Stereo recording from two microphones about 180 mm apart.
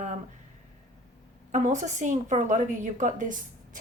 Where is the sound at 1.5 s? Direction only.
45° right (ahead or behind).